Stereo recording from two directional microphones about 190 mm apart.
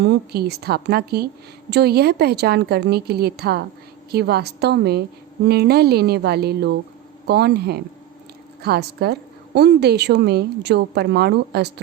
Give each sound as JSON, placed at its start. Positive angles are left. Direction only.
{"t": 0.0, "sound": "a woman's voice", "side_deg": -60}